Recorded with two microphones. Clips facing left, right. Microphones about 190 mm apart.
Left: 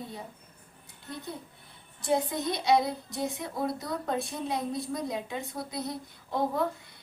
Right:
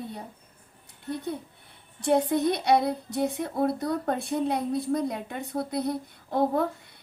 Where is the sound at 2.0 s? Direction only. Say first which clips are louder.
Right 6 dB; 65° right (ahead or behind).